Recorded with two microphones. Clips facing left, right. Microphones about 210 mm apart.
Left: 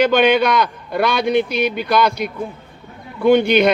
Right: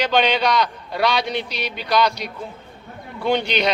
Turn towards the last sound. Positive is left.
turn(degrees=55)  # may be behind; listen again after turning